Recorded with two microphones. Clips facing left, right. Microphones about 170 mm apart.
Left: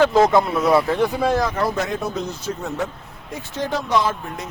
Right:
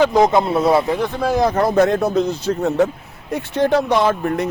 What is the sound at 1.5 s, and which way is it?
Speech, 45° right (ahead or behind).